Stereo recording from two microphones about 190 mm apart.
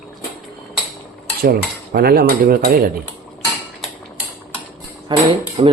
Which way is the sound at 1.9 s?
55° right (ahead or behind).